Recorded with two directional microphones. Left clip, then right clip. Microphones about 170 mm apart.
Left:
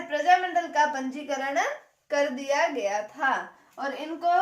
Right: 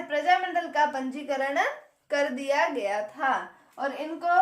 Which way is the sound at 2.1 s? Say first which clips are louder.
Even; 25° right (ahead or behind).